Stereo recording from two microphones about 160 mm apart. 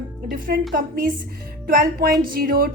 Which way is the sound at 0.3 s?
65° right (ahead or behind).